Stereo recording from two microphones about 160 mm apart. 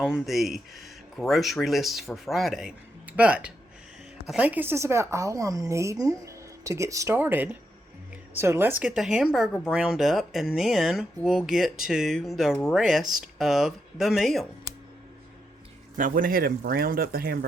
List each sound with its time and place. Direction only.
0.0 s a woman's voice: centre (ahead or behind)
16.0 s speech: 60° right (ahead or behind)